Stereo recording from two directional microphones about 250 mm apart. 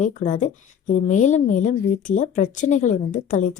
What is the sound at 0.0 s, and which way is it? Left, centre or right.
Speech, left.